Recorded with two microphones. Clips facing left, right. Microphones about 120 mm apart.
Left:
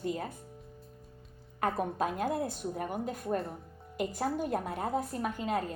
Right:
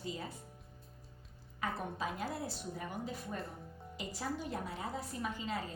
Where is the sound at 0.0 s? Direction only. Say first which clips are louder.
Left 8 dB; 55° left (ahead or behind).